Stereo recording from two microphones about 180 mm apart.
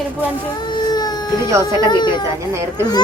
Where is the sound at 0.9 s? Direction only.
25° left (ahead or behind).